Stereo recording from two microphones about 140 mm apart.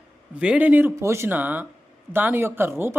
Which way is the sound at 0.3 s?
10° right (ahead or behind).